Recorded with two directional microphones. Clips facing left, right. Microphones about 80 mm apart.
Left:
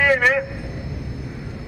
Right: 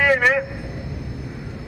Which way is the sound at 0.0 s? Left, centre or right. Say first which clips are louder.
Even; centre.